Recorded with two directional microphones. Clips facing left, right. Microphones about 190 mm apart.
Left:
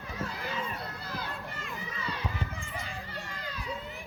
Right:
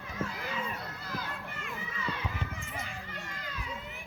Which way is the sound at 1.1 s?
35° left (ahead or behind).